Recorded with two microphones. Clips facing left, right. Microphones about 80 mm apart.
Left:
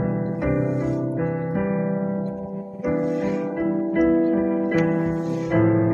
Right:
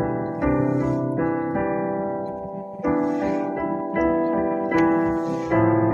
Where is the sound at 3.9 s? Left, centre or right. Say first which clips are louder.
Left 2 dB; right.